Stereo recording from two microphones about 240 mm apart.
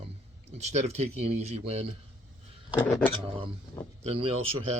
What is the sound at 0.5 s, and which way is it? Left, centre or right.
Speech, right.